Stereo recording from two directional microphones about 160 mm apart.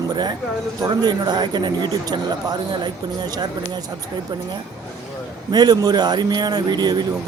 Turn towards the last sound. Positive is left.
turn(degrees=-25)  # may be behind; listen again after turning